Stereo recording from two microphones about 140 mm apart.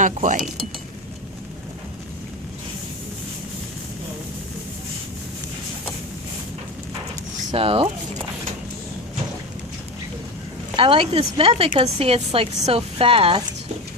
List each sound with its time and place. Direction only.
0.0 s speech: 65° right (ahead or behind)
7.5 s speech: 45° right (ahead or behind)
10.8 s speech: 40° right (ahead or behind)